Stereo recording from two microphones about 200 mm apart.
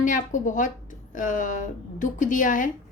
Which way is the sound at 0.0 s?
40° left (ahead or behind).